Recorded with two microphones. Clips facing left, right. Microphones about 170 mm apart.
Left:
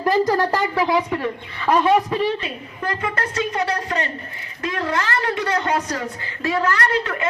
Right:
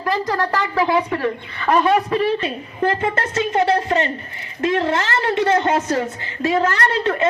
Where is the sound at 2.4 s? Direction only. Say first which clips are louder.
Right 7 dB; 25° right (ahead or behind).